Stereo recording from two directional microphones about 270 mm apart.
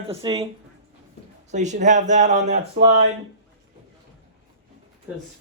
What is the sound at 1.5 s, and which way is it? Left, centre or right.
Speech, right.